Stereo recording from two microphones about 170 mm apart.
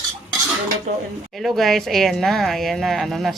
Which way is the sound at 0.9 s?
40° right (ahead or behind).